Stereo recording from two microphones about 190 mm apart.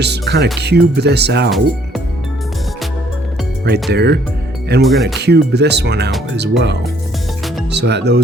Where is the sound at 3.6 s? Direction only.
60° right (ahead or behind).